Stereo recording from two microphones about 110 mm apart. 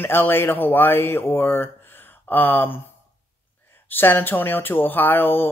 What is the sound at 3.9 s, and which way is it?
Speech, 20° left (ahead or behind).